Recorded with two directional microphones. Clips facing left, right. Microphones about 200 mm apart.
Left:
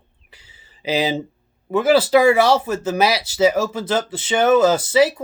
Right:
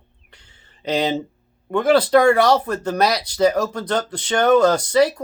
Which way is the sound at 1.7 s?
5° left (ahead or behind).